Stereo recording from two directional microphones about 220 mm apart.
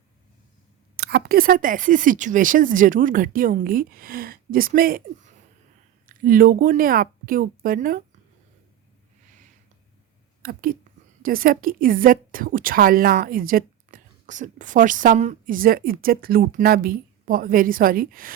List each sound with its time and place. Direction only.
0.9 s a woman's voice: 50° right (ahead or behind)
10.4 s a woman's voice: 40° right (ahead or behind)